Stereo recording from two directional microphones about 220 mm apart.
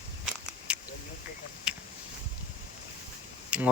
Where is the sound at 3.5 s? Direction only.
5° right (ahead or behind).